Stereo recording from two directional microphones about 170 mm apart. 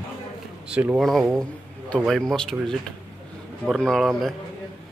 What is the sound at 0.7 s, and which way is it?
A man's voice, 5° right (ahead or behind).